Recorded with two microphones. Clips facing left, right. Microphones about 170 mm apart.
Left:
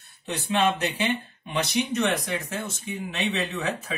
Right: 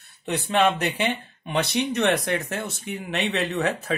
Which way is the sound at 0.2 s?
60° right (ahead or behind).